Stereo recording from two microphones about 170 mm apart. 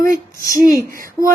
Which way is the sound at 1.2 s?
20° right (ahead or behind).